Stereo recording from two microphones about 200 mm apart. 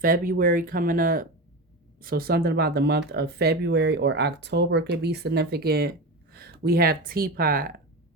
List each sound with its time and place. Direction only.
0.0 s speech: 45° right (ahead or behind)